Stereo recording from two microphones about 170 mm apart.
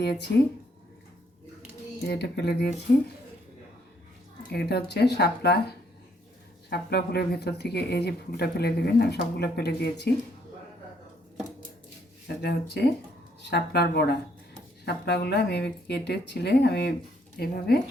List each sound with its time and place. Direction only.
0.0 s speech: 75° left (ahead or behind)
2.0 s speech: 75° left (ahead or behind)
2.9 s speech: 55° left (ahead or behind)
4.5 s speech: 70° left (ahead or behind)
12.4 s speech: 70° left (ahead or behind)
17.3 s speech: 65° left (ahead or behind)